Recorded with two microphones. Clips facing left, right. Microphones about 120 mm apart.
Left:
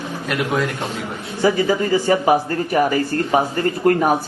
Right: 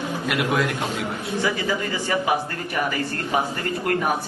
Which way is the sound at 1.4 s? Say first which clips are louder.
Left 9 dB; 35° left (ahead or behind).